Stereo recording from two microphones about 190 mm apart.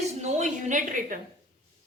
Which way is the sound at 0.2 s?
35° right (ahead or behind).